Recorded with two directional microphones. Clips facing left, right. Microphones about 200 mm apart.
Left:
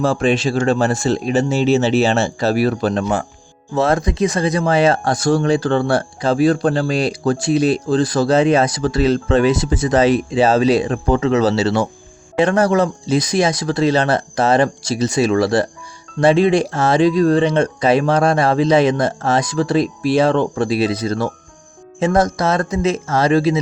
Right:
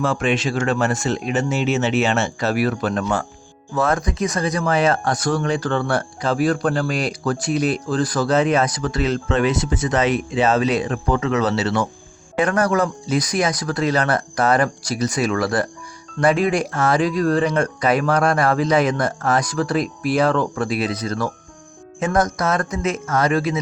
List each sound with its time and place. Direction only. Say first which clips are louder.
0.0 s speech: left 4 dB; 35° left (ahead or behind)